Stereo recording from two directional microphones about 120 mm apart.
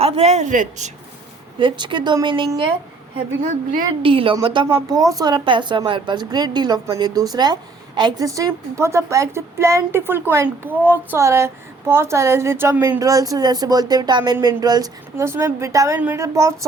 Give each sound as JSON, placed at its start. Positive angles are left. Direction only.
{"t": 0.0, "sound": "speech", "side_deg": -65}
{"t": 1.5, "sound": "speech", "side_deg": -40}
{"t": 4.0, "sound": "speech", "side_deg": -50}
{"t": 4.9, "sound": "a woman's voice", "side_deg": -30}
{"t": 13.0, "sound": "a woman's voice", "side_deg": -30}